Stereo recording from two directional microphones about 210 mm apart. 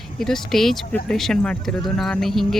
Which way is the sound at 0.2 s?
Centre (ahead or behind).